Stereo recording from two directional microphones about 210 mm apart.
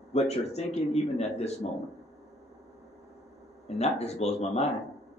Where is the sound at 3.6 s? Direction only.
30° left (ahead or behind).